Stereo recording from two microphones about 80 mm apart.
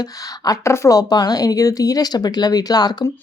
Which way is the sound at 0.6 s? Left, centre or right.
Left.